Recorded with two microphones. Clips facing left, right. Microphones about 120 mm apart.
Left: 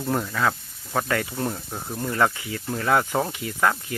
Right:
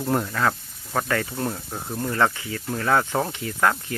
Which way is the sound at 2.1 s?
15° left (ahead or behind).